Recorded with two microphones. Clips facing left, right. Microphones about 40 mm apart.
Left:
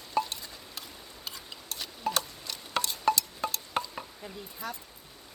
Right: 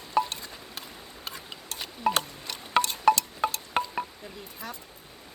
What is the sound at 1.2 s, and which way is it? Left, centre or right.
Tick-tock, right.